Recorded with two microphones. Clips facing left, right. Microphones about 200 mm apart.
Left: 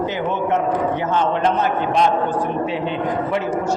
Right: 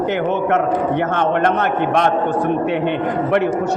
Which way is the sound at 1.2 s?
60° right (ahead or behind).